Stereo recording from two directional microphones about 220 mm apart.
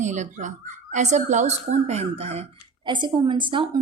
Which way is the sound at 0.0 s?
35° right (ahead or behind).